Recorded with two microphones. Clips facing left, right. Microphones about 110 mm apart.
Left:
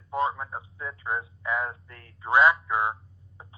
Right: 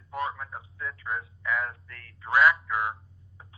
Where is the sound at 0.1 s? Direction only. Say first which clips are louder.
Left 5 dB; 25° left (ahead or behind).